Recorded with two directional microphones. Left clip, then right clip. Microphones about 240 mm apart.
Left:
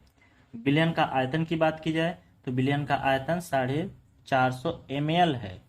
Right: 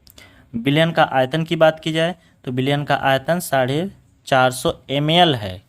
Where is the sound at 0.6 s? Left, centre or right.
Right.